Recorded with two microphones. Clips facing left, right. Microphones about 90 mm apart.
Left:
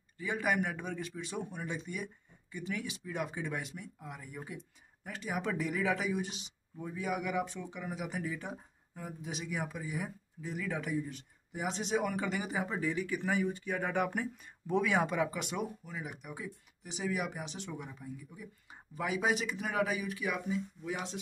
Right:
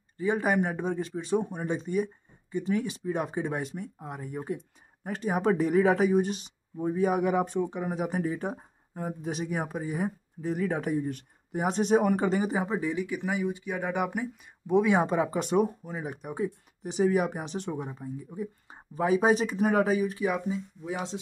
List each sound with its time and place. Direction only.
0.2 s speech: 35° right (ahead or behind); by 14.8 s 10° right (ahead or behind)
14.8 s speech: 25° right (ahead or behind)